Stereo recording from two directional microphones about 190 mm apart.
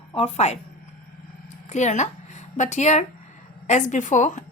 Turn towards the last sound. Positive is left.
turn(degrees=40)  # may be behind; listen again after turning